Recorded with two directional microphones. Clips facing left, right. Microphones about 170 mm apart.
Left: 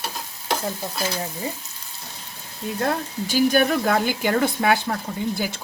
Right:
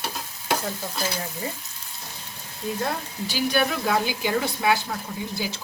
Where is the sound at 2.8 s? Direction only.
50° left (ahead or behind).